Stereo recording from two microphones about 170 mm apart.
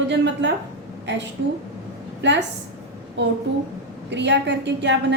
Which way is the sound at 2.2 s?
90° right.